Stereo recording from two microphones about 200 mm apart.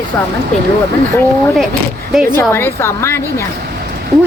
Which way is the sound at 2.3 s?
10° left (ahead or behind).